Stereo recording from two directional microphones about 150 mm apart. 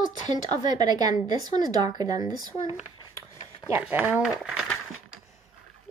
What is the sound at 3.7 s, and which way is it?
Speech, 10° right (ahead or behind).